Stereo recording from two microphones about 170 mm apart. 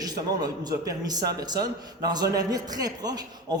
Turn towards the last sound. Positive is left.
turn(degrees=-25)  # may be behind; listen again after turning